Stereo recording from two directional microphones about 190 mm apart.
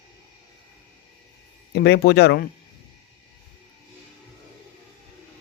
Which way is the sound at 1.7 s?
60° left (ahead or behind).